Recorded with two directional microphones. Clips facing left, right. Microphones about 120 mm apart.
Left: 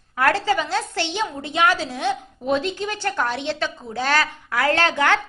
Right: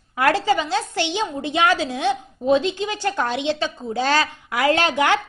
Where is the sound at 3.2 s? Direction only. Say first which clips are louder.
Right 2 dB; 15° right (ahead or behind).